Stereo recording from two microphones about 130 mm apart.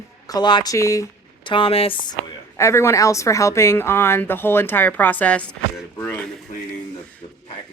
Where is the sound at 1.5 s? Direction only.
45° left (ahead or behind).